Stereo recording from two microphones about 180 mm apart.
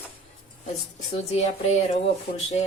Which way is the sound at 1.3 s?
40° left (ahead or behind).